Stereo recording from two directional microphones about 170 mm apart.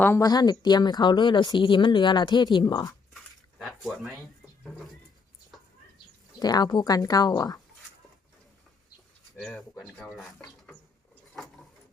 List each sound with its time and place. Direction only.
0.0 s speech: 15° left (ahead or behind)
3.6 s speech: centre (ahead or behind)
5.5 s a sound: centre (ahead or behind)
6.4 s speech: 25° left (ahead or behind)
9.4 s speech: centre (ahead or behind)